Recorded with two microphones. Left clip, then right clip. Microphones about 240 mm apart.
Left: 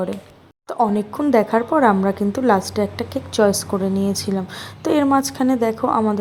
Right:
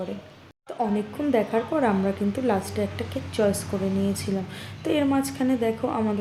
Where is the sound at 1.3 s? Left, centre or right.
Left.